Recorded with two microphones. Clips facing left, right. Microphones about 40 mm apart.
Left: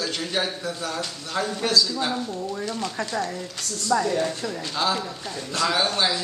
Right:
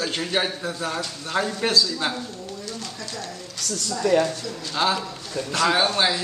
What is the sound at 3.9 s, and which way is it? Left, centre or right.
Speech, left.